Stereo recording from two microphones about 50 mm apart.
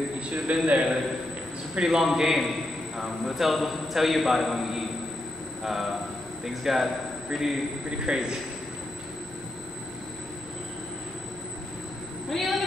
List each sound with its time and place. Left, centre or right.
0.5 s a man's voice: right; by 7.5 s centre
8.0 s a man's voice: centre
12.3 s speech: centre